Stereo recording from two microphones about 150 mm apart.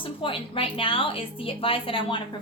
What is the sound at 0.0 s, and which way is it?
A woman's voice, 35° left (ahead or behind).